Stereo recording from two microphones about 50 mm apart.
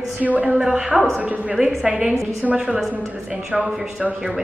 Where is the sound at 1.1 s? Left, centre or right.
Right.